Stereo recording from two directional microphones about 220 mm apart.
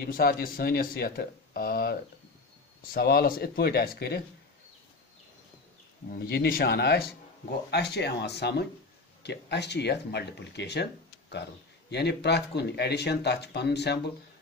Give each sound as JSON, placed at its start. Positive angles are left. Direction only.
{"t": 0.0, "sound": "speech", "side_deg": 45}
{"t": 6.0, "sound": "speech", "side_deg": 45}